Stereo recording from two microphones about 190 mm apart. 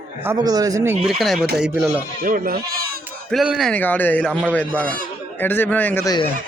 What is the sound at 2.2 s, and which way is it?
Speech, 50° right (ahead or behind).